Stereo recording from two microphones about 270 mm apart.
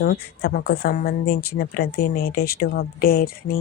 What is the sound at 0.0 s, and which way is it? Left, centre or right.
Speech, left.